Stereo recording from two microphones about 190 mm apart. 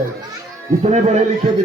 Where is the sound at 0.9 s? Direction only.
35° right (ahead or behind).